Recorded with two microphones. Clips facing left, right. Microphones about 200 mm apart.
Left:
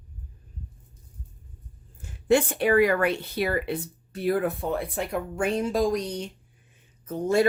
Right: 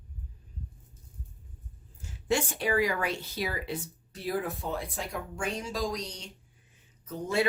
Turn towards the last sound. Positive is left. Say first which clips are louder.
# left 7 dB
turn(degrees=45)  # may be behind; listen again after turning